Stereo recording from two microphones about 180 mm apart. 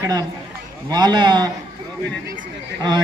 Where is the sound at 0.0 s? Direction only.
20° right (ahead or behind).